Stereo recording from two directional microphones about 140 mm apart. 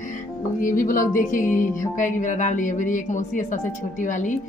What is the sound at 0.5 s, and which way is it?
A woman's voice, 70° left (ahead or behind).